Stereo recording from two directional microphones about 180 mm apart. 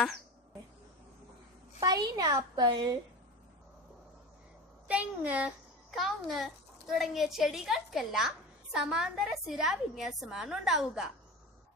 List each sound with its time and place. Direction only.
1.8 s a woman's voice: 20° right (ahead or behind)
4.8 s a woman's voice: 10° right (ahead or behind)